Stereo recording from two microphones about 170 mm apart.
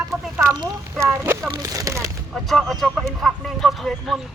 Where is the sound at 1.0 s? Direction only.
15° right (ahead or behind).